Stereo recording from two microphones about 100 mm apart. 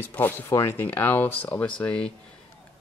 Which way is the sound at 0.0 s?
20° left (ahead or behind).